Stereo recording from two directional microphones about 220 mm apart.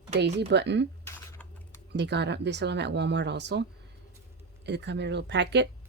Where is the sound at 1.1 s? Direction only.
10° left (ahead or behind).